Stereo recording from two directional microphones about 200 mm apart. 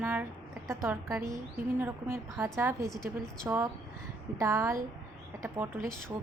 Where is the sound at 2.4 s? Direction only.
10° right (ahead or behind).